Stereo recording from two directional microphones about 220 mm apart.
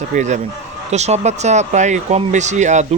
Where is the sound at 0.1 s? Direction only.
35° right (ahead or behind).